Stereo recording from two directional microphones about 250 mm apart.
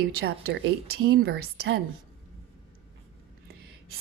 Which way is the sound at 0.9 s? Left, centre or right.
Right.